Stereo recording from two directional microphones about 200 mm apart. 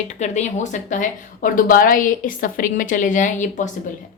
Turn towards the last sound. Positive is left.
turn(degrees=40)  # may be behind; listen again after turning